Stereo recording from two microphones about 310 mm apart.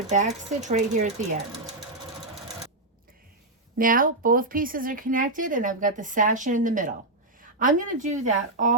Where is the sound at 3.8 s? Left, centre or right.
Right.